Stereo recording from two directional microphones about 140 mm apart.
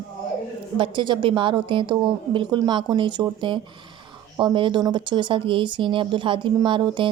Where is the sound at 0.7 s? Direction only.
35° right (ahead or behind).